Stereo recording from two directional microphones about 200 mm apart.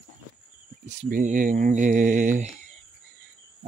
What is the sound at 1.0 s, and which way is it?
Speech, 40° right (ahead or behind).